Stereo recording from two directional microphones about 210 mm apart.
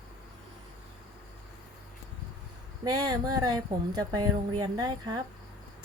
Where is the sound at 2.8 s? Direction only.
20° right (ahead or behind).